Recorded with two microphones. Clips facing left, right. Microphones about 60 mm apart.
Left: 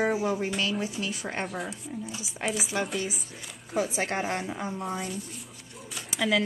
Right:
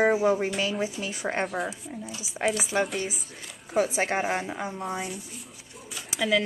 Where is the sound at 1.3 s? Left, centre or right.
Centre.